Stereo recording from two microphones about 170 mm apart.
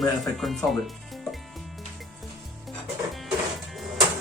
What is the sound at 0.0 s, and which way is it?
Speech, centre (ahead or behind).